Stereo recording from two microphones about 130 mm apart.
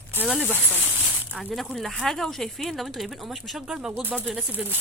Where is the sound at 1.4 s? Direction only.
Centre (ahead or behind).